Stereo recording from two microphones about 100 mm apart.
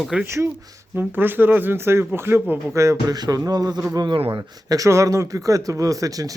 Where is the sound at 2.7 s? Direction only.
35° right (ahead or behind).